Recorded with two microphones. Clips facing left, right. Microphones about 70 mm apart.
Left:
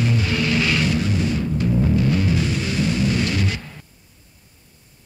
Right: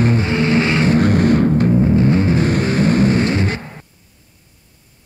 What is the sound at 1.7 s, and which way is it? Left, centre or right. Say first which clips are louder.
Music: right 6 dB; right.